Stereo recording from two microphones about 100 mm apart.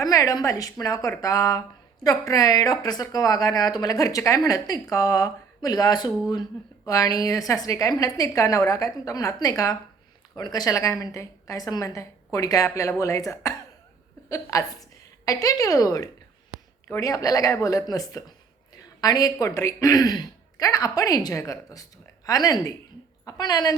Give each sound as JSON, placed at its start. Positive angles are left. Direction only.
{"t": 0.0, "sound": "a woman's voice", "side_deg": 35}